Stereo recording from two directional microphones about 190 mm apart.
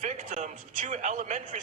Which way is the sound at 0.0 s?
40° right (ahead or behind).